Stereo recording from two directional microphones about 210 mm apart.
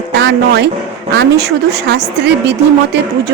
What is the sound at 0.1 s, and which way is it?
Speech, 55° right (ahead or behind).